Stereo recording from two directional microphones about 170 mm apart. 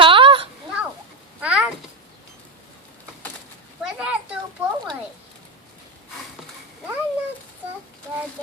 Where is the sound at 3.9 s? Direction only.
10° right (ahead or behind).